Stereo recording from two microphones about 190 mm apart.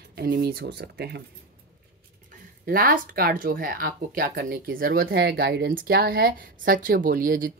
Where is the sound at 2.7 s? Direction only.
50° right (ahead or behind).